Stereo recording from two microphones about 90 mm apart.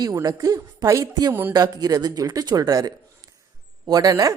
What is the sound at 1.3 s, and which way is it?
Speech, 25° right (ahead or behind).